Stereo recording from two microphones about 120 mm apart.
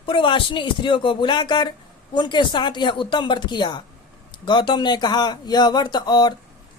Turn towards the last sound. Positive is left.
turn(degrees=35)  # may be behind; listen again after turning